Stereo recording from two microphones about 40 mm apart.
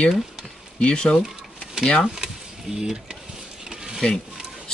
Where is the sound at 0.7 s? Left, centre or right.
Left.